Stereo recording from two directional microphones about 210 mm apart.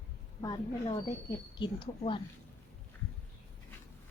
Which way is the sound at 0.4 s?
20° left (ahead or behind).